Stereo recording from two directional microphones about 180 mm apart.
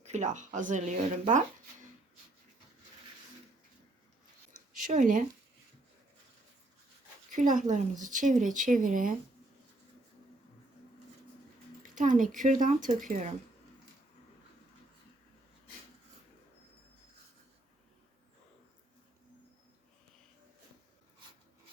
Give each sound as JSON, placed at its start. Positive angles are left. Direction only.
{"t": 0.0, "sound": "speech", "side_deg": -40}
{"t": 4.8, "sound": "speech", "side_deg": -45}
{"t": 7.3, "sound": "speech", "side_deg": -45}
{"t": 11.9, "sound": "speech", "side_deg": -45}